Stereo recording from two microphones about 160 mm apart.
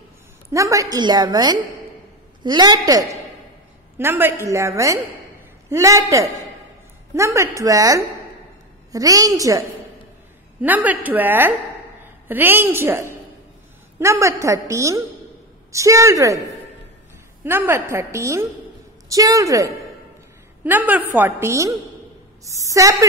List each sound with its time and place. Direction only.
0.5 s a woman's voice: 20° right (ahead or behind)
17.4 s a woman's voice: 15° right (ahead or behind)